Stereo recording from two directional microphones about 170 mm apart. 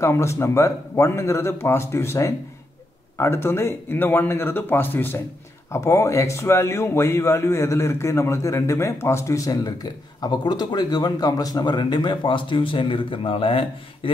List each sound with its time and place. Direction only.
0.0 s a man's voice: 15° left (ahead or behind); by 14.1 s 30° left (ahead or behind)